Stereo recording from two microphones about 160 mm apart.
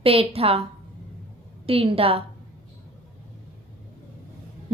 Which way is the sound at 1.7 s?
35° right (ahead or behind).